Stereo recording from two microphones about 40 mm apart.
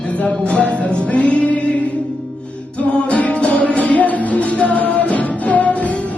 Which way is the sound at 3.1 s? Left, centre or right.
Left.